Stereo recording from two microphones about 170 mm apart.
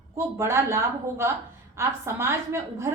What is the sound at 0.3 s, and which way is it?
A woman's voice, 15° right (ahead or behind).